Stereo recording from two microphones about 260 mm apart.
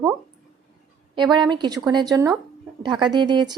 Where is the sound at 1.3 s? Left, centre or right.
Centre.